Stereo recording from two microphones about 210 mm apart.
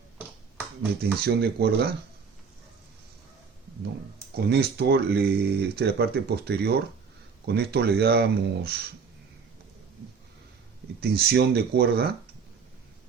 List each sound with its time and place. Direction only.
1.0 s speech: 50° right (ahead or behind)
4.4 s speech: 50° right (ahead or behind)
11.0 s speech: 50° right (ahead or behind)